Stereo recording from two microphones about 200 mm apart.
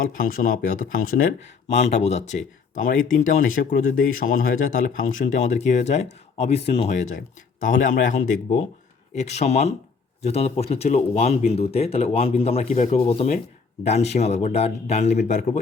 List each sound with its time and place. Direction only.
0.0 s speech: 45° left (ahead or behind)
1.6 s speech: 35° left (ahead or behind)